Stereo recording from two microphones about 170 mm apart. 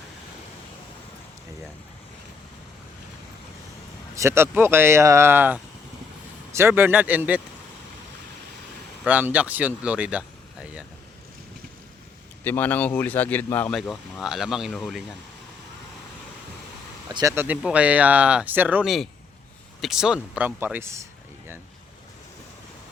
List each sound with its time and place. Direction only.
4.1 s speech: 15° right (ahead or behind)
9.0 s speech: 10° right (ahead or behind)
12.5 s speech: 10° left (ahead or behind)
17.1 s speech: 25° right (ahead or behind)
17.3 s speech: 10° right (ahead or behind)